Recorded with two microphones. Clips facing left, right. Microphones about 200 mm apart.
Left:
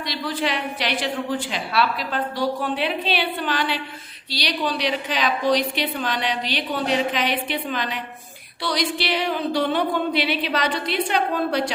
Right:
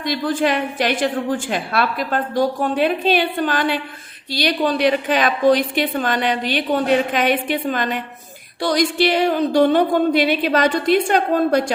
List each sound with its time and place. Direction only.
0.0 s a woman's voice: 50° right (ahead or behind)